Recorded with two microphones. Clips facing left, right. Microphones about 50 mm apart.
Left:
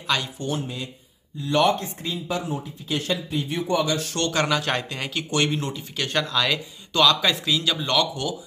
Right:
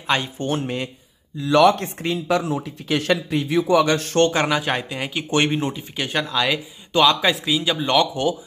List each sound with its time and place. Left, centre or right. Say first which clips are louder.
0.0 s speech: right 4 dB; right
0.5 s speech: right 5 dB; right
1.4 s speech: right 5 dB; right
1.7 s speech: right 4 dB; right
3.8 s speech: right 7 dB; right
4.3 s speech: right 2 dB; centre
5.3 s speech: right 4 dB; right